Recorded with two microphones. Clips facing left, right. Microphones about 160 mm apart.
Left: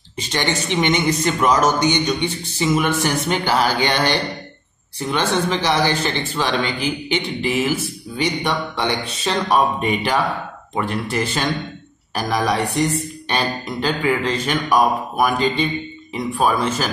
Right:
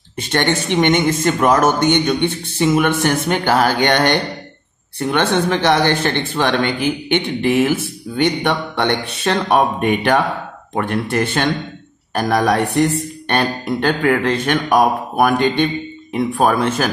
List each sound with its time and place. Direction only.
0.2 s speech: 55° right (ahead or behind)